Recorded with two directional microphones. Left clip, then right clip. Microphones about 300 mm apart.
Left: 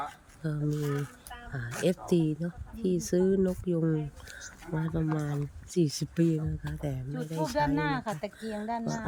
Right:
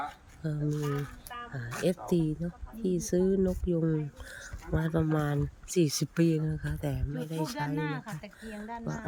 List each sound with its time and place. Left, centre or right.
0.0 s speech: centre
7.8 s speech: left